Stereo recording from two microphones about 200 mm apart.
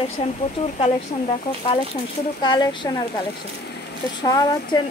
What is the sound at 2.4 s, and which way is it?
Speech, 20° left (ahead or behind).